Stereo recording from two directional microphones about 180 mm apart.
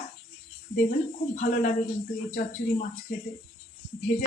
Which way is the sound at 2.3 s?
40° left (ahead or behind).